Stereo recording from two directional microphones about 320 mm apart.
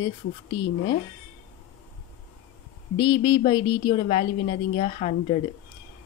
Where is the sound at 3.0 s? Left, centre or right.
Centre.